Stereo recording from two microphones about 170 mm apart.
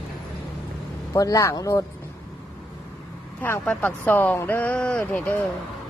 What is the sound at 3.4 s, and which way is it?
Speech, 10° left (ahead or behind).